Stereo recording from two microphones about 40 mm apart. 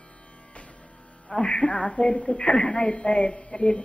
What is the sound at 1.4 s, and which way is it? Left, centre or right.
A man's voice, left.